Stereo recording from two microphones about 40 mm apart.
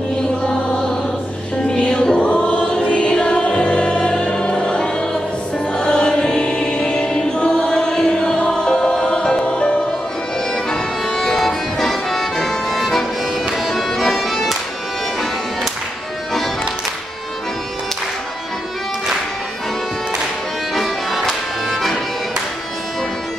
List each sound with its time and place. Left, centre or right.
0.5 s music: centre
2.1 s music: left
10.7 s music: centre
20.7 s music: centre